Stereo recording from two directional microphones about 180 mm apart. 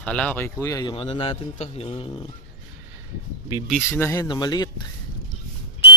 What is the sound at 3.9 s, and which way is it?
Speech, 15° left (ahead or behind).